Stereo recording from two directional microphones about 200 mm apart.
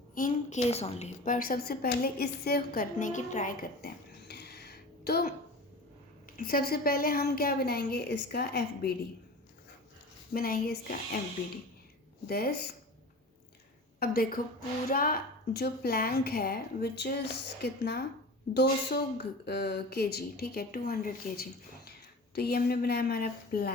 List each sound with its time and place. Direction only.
0.1 s a woman's voice: 40° left (ahead or behind)
6.3 s speech: 45° left (ahead or behind)
10.3 s speech: 45° left (ahead or behind)
12.3 s speech: 50° left (ahead or behind)
14.0 s speech: 45° left (ahead or behind)